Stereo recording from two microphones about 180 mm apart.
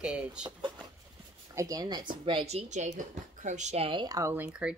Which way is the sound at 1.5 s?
20° right (ahead or behind).